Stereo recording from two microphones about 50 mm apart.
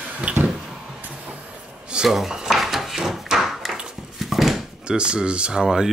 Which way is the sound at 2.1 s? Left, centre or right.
Centre.